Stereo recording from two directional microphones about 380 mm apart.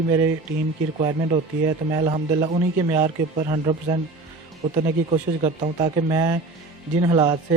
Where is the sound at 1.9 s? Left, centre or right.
Centre.